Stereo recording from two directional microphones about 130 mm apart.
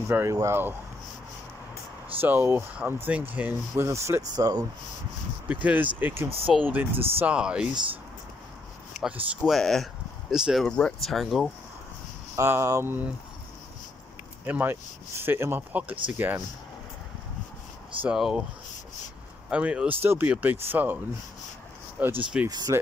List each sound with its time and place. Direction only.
0.1 s speech: 20° right (ahead or behind)
2.1 s speech: 15° right (ahead or behind)
5.5 s speech: 10° right (ahead or behind)
9.0 s speech: 5° right (ahead or behind)
12.4 s speech: 20° right (ahead or behind)
14.4 s speech: 15° right (ahead or behind)
18.0 s speech: 5° right (ahead or behind)
19.5 s speech: 10° right (ahead or behind)
22.5 s speech: 30° right (ahead or behind)